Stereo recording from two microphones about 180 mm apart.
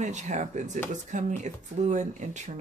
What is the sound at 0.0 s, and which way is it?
Speech, 40° right (ahead or behind).